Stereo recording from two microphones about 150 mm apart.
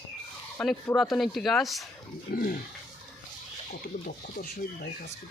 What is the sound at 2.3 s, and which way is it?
Speech, 65° left (ahead or behind).